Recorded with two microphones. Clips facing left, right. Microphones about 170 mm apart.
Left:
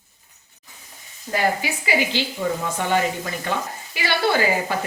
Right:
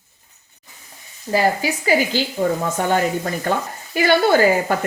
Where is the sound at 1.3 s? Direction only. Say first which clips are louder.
Right 4 dB; 40° right (ahead or behind).